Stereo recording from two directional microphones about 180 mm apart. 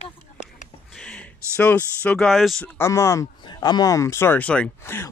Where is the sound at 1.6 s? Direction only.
10° left (ahead or behind).